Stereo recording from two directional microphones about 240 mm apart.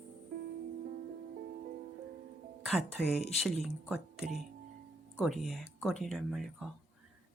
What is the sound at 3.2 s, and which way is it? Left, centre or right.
Speech, left.